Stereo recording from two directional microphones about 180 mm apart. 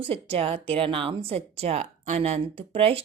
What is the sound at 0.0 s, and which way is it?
A woman's voice, 30° right (ahead or behind).